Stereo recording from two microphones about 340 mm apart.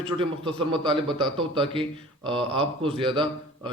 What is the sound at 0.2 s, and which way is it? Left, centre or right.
A man's voice, centre.